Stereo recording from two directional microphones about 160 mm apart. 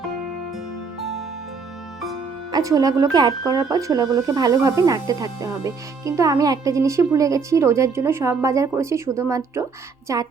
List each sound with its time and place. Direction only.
0.9 s music: centre (ahead or behind)
2.5 s speech: 20° right (ahead or behind)